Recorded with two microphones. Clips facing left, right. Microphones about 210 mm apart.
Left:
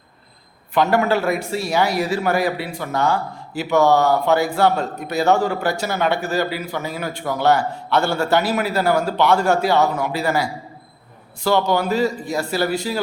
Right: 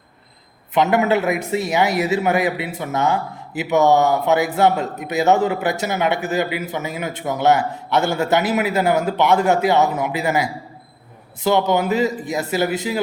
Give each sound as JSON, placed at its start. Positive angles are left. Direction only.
{"t": 0.7, "sound": "a man's voice", "side_deg": -20}